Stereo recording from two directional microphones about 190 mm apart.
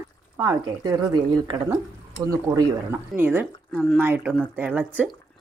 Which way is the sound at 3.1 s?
10° right (ahead or behind).